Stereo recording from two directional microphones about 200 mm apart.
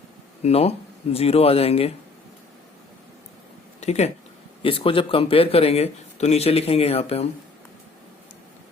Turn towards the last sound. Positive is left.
turn(degrees=30)  # may be behind; listen again after turning